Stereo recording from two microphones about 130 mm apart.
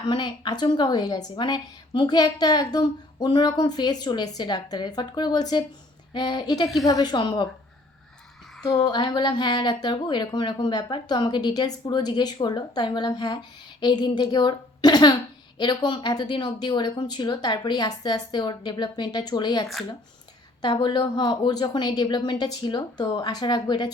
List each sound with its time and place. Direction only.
0.1 s speech: 35° left (ahead or behind)
8.6 s speech: 30° left (ahead or behind)
20.8 s speech: 35° left (ahead or behind)